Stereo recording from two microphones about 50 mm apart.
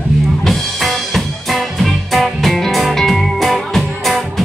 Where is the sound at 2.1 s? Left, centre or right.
Centre.